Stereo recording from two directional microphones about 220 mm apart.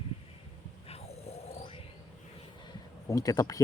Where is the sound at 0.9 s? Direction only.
30° left (ahead or behind).